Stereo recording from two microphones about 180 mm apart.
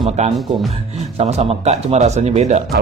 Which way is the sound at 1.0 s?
35° right (ahead or behind).